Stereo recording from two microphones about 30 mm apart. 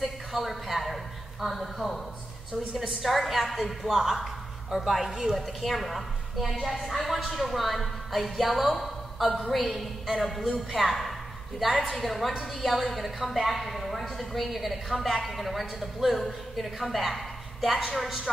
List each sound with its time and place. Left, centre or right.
0.0 s a sound: centre
2.7 s a woman's voice: centre
3.0 s speech: centre
3.9 s a woman's voice: centre